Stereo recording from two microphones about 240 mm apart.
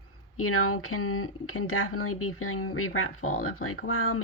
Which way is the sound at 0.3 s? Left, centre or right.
Left.